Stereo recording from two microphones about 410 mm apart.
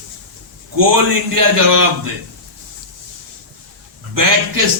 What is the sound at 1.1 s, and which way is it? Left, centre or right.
Speech, right.